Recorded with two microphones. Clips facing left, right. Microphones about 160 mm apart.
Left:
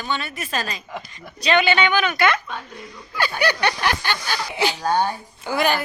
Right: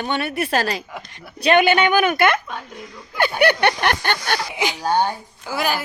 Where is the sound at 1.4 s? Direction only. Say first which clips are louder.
Right 3 dB; 55° right (ahead or behind).